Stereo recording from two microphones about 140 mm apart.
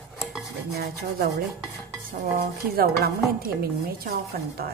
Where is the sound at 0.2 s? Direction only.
Centre (ahead or behind).